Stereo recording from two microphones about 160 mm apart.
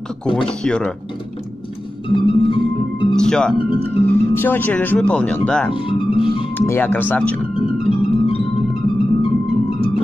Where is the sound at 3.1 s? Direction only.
5° left (ahead or behind).